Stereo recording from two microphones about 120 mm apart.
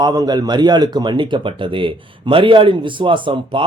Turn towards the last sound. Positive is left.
turn(degrees=-45)  # may be behind; listen again after turning